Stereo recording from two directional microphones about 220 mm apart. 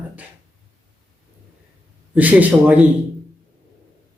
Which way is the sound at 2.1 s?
5° right (ahead or behind).